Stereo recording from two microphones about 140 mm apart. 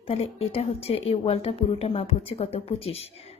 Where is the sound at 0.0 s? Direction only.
45° left (ahead or behind).